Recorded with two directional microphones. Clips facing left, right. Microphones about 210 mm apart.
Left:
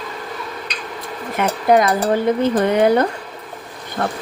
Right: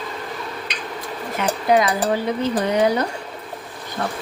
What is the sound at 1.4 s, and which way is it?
Speech, 50° left (ahead or behind).